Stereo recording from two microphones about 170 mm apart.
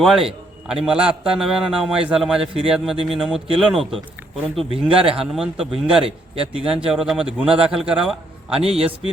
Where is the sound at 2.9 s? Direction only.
30° right (ahead or behind).